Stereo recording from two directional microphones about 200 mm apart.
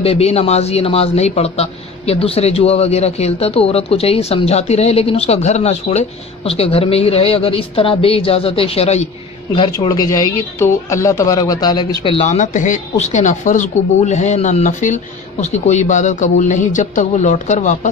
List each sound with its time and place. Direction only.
0.0 s speech: 30° left (ahead or behind)